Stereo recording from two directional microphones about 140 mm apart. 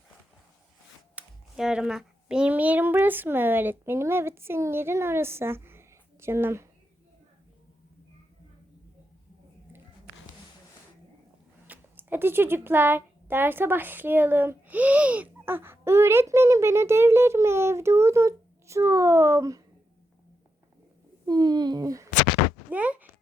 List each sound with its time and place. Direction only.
1.1 s a child's voice: 5° right (ahead or behind)
11.7 s speech: 15° right (ahead or behind)
21.2 s speech: 30° right (ahead or behind)
22.7 s speech: 10° right (ahead or behind)